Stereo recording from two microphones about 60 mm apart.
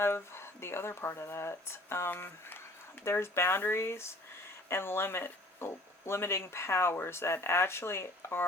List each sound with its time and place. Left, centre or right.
0.0 s speech: left